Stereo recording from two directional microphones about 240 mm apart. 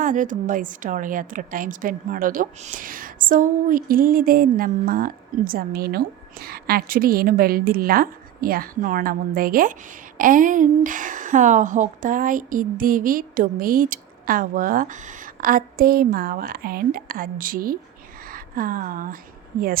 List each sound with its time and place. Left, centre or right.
0.0 s a woman's voice: right